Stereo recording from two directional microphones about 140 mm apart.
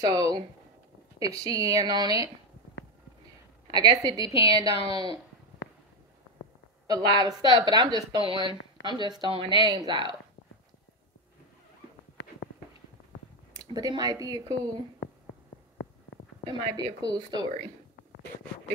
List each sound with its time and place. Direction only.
0.0 s speech: 25° right (ahead or behind)
1.4 s speech: 25° right (ahead or behind)
3.7 s speech: 30° right (ahead or behind)
6.9 s speech: 30° right (ahead or behind)
13.7 s speech: 25° right (ahead or behind)
16.4 s speech: 30° right (ahead or behind)